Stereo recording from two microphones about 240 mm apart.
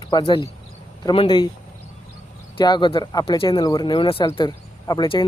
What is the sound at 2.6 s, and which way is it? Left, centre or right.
Speech, centre.